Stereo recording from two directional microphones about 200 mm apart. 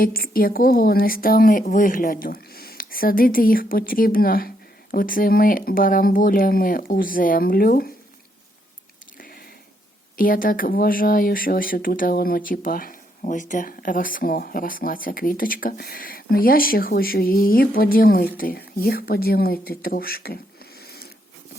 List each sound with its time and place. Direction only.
0.0 s speech: 45° left (ahead or behind)
9.1 s a sound: 45° left (ahead or behind)
10.2 s speech: 45° left (ahead or behind)